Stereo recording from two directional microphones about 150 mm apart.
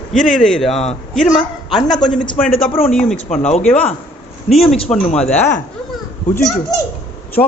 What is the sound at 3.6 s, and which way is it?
A man's voice, 10° left (ahead or behind).